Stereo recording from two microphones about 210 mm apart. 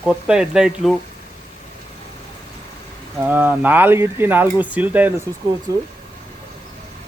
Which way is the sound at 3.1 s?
10° right (ahead or behind).